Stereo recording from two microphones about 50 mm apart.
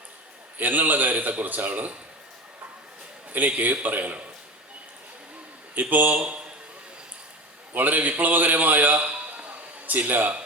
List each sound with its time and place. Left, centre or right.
0.6 s a man's voice: right
3.3 s a man's voice: right
5.7 s a man's voice: right
7.7 s a man's voice: right